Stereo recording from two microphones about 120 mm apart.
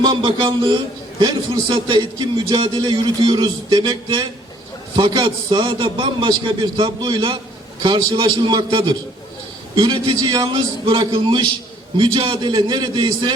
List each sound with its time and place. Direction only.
0.0 s a man's voice: 40° right (ahead or behind)
10.8 s a man's voice: 45° right (ahead or behind)